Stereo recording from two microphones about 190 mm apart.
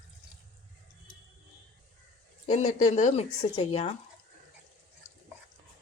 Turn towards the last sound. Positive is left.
turn(degrees=30)  # may be behind; listen again after turning